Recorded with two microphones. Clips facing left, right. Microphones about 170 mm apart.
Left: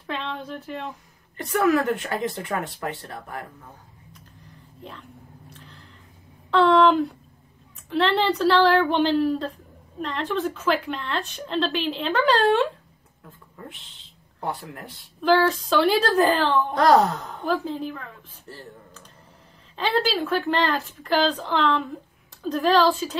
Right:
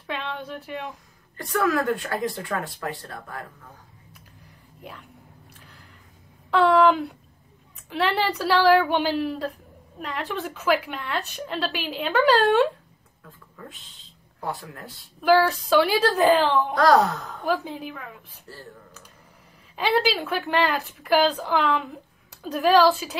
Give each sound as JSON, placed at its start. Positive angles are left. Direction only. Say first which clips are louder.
{"t": 0.0, "sound": "speech", "louder": "left 1 dB", "side_deg": -5}
{"t": 1.3, "sound": "speech", "louder": "left 3 dB", "side_deg": 20}
{"t": 6.5, "sound": "a woman's voice", "louder": "left 1 dB", "side_deg": -5}
{"t": 14.4, "sound": "speech", "louder": "left 1 dB", "side_deg": 20}
{"t": 15.1, "sound": "a woman's voice", "louder": "right 1 dB", "side_deg": -5}
{"t": 17.7, "sound": "speech", "louder": "left 4 dB", "side_deg": -5}
{"t": 18.5, "sound": "speech", "louder": "left 2 dB", "side_deg": 25}
{"t": 19.7, "sound": "a woman's voice", "louder": "right 1 dB", "side_deg": -10}